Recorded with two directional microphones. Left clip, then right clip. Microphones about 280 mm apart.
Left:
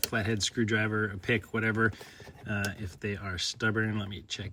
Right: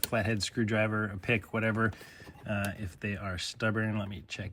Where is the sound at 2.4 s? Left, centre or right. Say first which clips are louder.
Left 1 dB; centre.